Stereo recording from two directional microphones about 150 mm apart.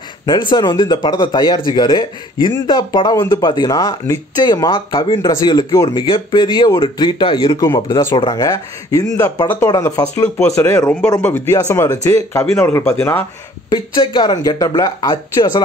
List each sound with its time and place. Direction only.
0.3 s speech: 30° left (ahead or behind); by 12.9 s 15° left (ahead or behind)
13.7 s speech: 30° left (ahead or behind)